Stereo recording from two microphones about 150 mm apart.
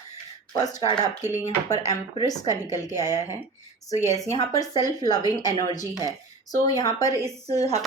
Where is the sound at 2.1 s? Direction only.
25° left (ahead or behind).